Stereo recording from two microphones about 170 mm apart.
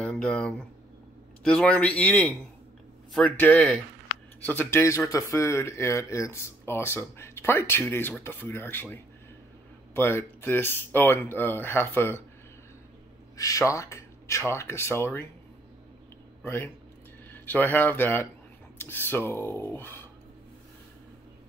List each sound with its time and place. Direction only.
0.0 s speech: 5° left (ahead or behind)
13.4 s speech: 20° left (ahead or behind)
16.4 s speech: 15° left (ahead or behind)